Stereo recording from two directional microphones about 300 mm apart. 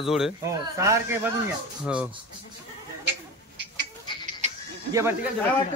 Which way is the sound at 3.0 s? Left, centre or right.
Right.